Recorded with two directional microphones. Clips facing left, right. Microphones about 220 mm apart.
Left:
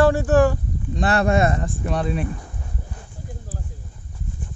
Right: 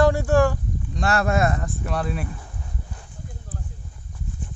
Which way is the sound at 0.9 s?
Centre (ahead or behind).